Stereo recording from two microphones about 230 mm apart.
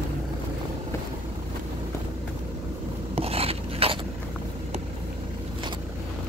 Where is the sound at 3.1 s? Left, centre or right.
Right.